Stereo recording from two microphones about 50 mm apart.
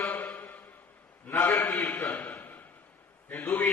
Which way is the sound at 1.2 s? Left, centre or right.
Left.